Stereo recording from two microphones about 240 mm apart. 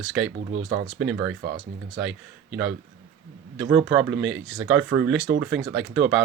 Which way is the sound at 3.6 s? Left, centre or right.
Centre.